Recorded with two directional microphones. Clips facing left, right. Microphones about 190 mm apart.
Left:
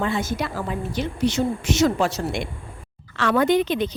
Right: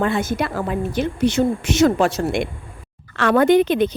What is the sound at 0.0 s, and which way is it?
A woman's voice, 55° right (ahead or behind).